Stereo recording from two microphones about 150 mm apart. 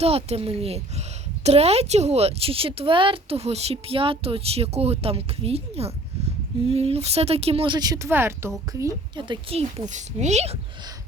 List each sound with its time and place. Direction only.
0.0 s a woman's voice: 40° right (ahead or behind); by 9.0 s 20° right (ahead or behind)
9.1 s speech: 30° right (ahead or behind)